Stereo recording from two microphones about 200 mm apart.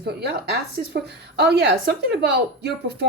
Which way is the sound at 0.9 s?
55° right (ahead or behind).